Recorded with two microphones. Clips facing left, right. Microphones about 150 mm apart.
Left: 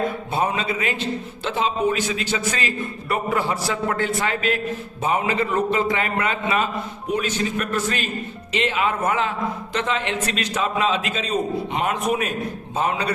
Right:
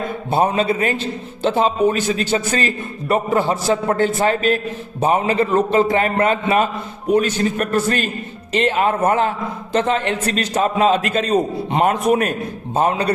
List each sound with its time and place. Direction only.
0.3 s a man's voice: 35° right (ahead or behind)